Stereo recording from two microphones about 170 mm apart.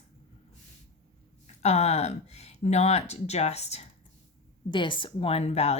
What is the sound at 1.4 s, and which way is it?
Speech, 40° left (ahead or behind).